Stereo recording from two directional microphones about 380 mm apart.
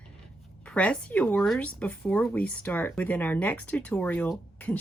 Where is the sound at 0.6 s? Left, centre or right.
Centre.